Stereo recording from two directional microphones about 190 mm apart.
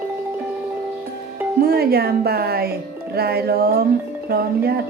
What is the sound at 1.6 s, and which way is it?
Speech, 55° right (ahead or behind).